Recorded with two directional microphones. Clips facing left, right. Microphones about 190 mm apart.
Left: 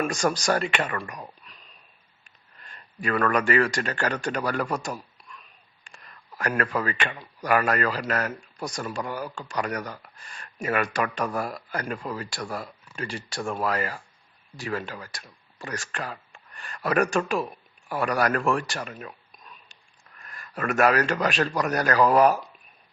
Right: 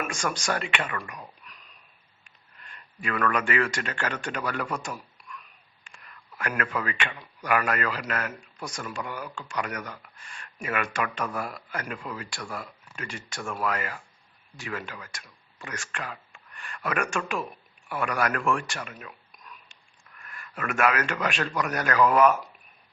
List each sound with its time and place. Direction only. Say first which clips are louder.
0.0 s a man's voice: left 6 dB; 35° left (ahead or behind)
2.6 s a man's voice: left 4 dB; 40° left (ahead or behind)